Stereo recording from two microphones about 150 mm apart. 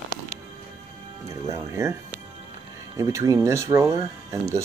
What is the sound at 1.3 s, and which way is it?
Speech, 20° right (ahead or behind).